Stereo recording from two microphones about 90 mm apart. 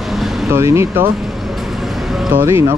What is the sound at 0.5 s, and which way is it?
Speech, 30° right (ahead or behind).